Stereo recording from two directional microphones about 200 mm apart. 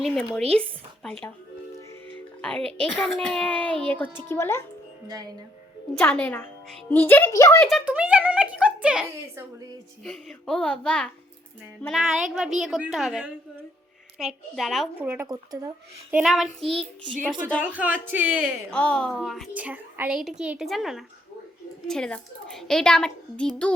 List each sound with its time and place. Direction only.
0.0 s a woman's voice: centre (ahead or behind)
2.4 s a woman's voice: 5° left (ahead or behind)
5.0 s speech: 20° right (ahead or behind)
5.9 s a woman's voice: 5° left (ahead or behind)
7.6 s a woman's voice: 5° right (ahead or behind)
16.1 s a woman's voice: centre (ahead or behind)
18.7 s a woman's voice: 5° left (ahead or behind)